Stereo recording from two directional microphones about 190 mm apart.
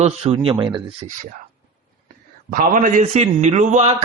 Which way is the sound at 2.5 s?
45° right (ahead or behind).